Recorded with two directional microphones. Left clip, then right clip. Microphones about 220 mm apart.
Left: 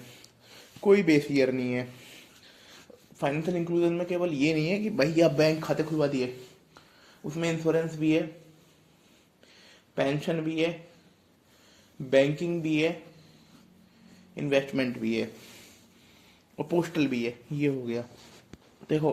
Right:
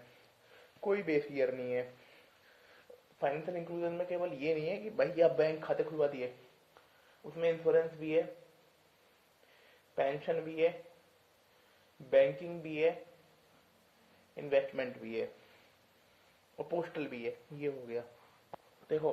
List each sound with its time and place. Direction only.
0.8 s a man's voice: 30° left (ahead or behind)
3.2 s a man's voice: 30° left (ahead or behind)
7.3 s a man's voice: 30° left (ahead or behind)
9.9 s a man's voice: 30° left (ahead or behind)
12.1 s a man's voice: 30° left (ahead or behind)
14.3 s a man's voice: 30° left (ahead or behind)
16.6 s a man's voice: 30° left (ahead or behind)